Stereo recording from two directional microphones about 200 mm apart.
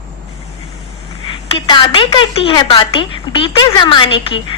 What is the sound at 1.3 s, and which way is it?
A woman's voice, 25° left (ahead or behind).